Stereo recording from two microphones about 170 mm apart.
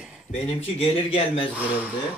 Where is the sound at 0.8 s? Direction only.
35° left (ahead or behind).